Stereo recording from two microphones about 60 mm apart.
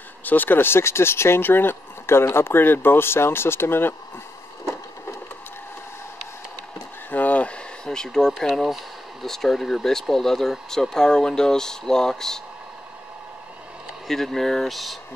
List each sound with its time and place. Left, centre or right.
0.2 s speech: left
7.1 s a sound: left
7.8 s speech: centre
14.0 s speech: centre